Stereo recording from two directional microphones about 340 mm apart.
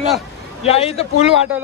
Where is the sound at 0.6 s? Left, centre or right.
Centre.